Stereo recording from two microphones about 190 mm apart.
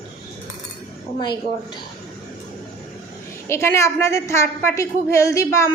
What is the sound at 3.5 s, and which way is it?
A woman's voice, 15° left (ahead or behind).